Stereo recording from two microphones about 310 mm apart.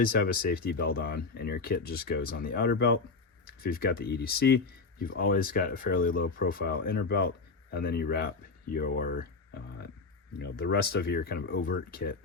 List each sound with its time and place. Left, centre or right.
0.0 s speech: left